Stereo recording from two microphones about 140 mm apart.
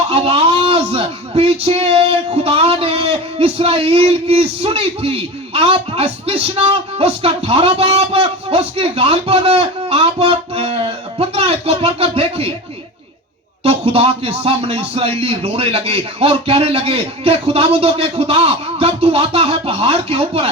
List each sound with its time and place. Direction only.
0.1 s a man's voice: 45° right (ahead or behind)
13.7 s speech: 45° right (ahead or behind)